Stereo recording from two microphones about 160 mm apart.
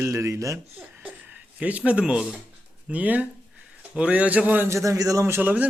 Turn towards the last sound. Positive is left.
turn(degrees=-10)  # may be behind; listen again after turning